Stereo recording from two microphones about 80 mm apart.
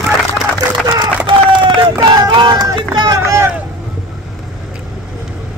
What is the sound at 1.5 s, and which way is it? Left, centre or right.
Run, right.